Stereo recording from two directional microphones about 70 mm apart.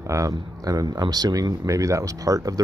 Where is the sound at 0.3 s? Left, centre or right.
Right.